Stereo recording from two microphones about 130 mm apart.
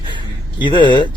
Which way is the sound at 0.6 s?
35° left (ahead or behind).